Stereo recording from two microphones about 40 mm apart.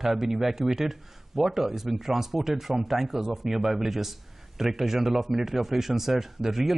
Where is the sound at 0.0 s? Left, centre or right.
Centre.